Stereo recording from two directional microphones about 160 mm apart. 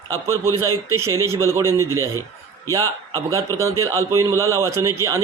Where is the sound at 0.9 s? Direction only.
15° right (ahead or behind).